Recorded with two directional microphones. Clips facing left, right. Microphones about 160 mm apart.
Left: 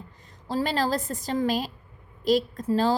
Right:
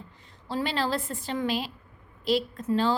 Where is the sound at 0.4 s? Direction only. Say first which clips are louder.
Left 3 dB; 40° left (ahead or behind).